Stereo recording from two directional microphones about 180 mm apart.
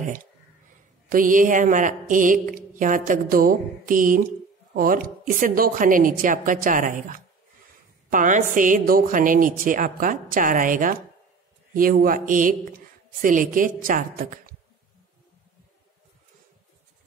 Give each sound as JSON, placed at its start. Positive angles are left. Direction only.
{"t": 0.0, "sound": "a woman's voice", "side_deg": -50}